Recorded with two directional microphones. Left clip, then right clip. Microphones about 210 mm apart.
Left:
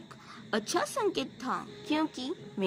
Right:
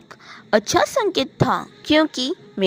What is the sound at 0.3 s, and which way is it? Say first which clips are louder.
A woman's voice: right 14 dB; 35° right (ahead or behind).